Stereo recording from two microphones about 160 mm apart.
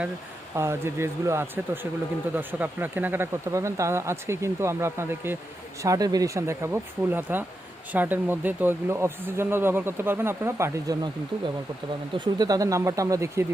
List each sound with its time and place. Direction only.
0.5 s speech: 15° right (ahead or behind)
12.1 s speech: 25° right (ahead or behind)